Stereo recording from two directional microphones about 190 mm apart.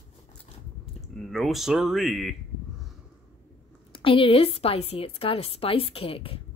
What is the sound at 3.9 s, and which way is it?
A woman's voice, 30° left (ahead or behind).